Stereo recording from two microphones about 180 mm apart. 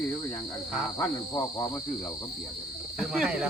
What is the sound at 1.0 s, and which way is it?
Speech, 20° left (ahead or behind).